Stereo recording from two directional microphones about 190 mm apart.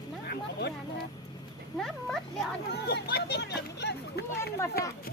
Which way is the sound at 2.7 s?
55° left (ahead or behind).